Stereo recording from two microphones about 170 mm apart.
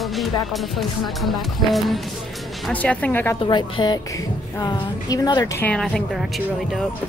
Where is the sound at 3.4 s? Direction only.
25° left (ahead or behind); by 5.8 s 10° left (ahead or behind).